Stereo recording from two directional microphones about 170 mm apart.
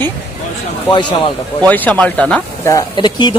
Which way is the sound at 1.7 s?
10° left (ahead or behind).